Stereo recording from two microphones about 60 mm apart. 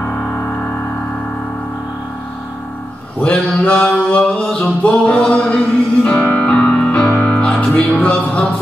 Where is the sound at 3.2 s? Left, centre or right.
Left.